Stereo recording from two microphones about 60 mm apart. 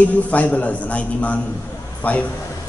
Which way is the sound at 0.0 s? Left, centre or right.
Left.